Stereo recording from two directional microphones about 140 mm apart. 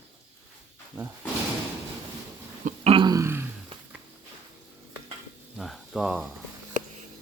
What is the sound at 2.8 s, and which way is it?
Throat clearing, 40° right (ahead or behind).